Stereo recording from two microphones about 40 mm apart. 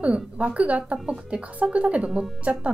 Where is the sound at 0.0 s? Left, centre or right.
Right.